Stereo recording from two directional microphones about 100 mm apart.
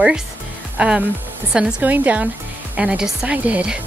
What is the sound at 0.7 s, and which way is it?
A woman's voice, 10° right (ahead or behind).